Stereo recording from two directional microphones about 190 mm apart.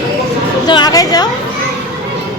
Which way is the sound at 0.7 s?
20° left (ahead or behind).